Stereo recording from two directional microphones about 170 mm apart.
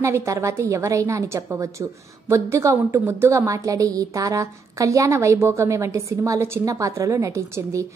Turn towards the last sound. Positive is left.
turn(degrees=-15)  # may be behind; listen again after turning